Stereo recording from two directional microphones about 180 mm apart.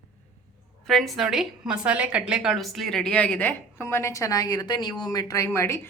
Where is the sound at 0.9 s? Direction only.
Centre (ahead or behind).